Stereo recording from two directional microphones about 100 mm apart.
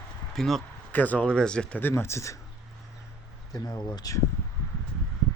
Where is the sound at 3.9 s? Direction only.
40° left (ahead or behind).